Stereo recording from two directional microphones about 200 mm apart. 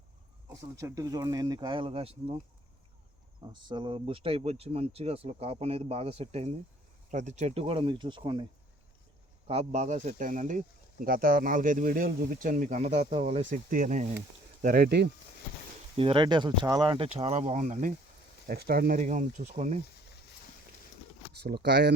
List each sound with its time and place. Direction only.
0.5 s speech: 15° right (ahead or behind)
3.5 s speech: 25° right (ahead or behind)
9.5 s speech: 30° right (ahead or behind); by 15.1 s 55° right (ahead or behind)
16.0 s speech: 25° right (ahead or behind)
18.4 s speech: 50° right (ahead or behind)
21.3 s speech: 55° right (ahead or behind)